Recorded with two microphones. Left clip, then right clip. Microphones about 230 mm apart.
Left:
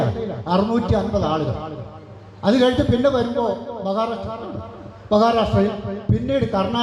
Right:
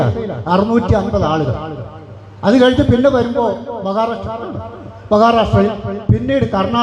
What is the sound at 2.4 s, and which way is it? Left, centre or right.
Speech, right.